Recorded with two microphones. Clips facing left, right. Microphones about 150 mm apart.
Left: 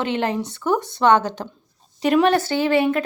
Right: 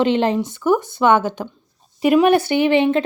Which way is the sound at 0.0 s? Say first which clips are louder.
Right 6 dB; 20° right (ahead or behind).